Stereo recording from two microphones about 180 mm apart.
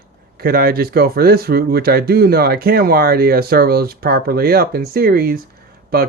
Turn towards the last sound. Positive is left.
turn(degrees=-60)  # may be behind; listen again after turning